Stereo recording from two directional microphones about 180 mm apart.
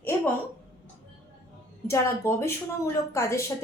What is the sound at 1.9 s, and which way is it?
A woman's voice, 15° left (ahead or behind).